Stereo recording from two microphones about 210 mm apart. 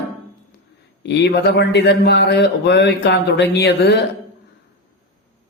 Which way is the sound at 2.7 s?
55° left (ahead or behind).